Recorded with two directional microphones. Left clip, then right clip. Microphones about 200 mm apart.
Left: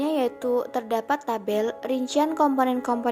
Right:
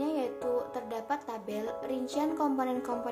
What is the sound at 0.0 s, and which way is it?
Speech, 35° left (ahead or behind).